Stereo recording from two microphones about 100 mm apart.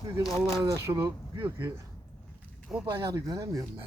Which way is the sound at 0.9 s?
35° right (ahead or behind).